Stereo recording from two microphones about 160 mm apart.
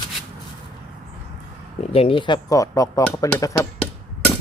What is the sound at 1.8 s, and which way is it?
Speech, 35° left (ahead or behind).